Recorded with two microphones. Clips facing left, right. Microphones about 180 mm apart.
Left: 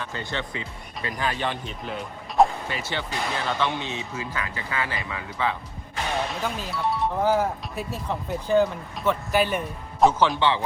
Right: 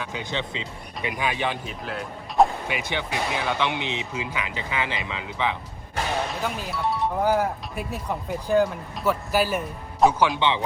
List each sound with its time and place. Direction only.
0.0 s speech: 15° right (ahead or behind); by 2.5 s centre (ahead or behind)
2.6 s speech: 15° right (ahead or behind)
6.4 s speech: 5° right (ahead or behind)